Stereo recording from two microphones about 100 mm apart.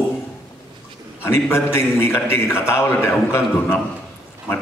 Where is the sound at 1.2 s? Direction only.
25° left (ahead or behind).